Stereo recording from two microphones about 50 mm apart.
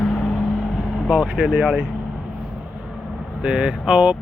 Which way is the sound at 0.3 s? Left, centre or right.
Centre.